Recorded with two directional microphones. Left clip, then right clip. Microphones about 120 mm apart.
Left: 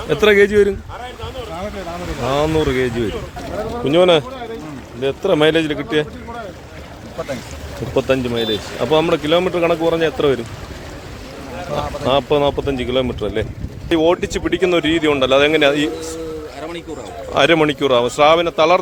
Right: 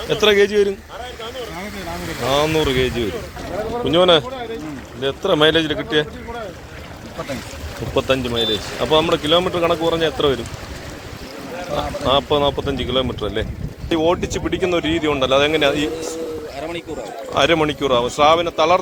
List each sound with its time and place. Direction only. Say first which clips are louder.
0.1 s speech: left 2 dB; 50° left (ahead or behind)
2.3 s speech: even; 20° left (ahead or behind)
3.8 s speech: left 1 dB; 35° left (ahead or behind)
7.9 s speech: left 1 dB; 40° left (ahead or behind)
12.0 s speech: left 1 dB; 45° left (ahead or behind)
13.9 s speech: left 3 dB; 60° left (ahead or behind)
17.3 s speech: left 3 dB; 65° left (ahead or behind)